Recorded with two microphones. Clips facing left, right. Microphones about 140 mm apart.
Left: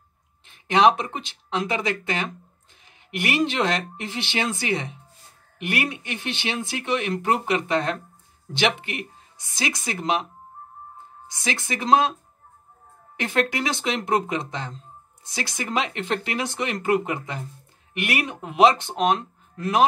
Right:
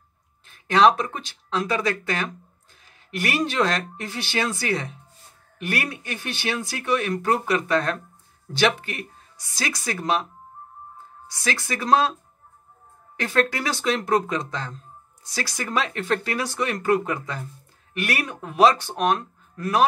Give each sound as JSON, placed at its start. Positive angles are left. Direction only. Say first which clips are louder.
{"t": 0.5, "sound": "speech", "louder": "even", "side_deg": 20}
{"t": 11.2, "sound": "speech", "louder": "right 1 dB", "side_deg": 20}
{"t": 13.2, "sound": "speech", "louder": "right 1 dB", "side_deg": 20}